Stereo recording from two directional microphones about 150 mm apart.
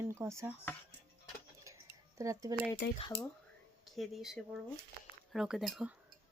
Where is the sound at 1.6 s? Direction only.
20° right (ahead or behind).